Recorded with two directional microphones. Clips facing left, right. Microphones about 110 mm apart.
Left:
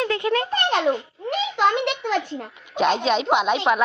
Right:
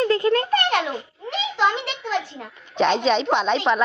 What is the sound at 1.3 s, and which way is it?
Speech, 55° left (ahead or behind).